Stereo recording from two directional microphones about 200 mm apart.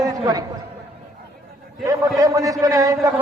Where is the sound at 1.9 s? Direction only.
15° right (ahead or behind).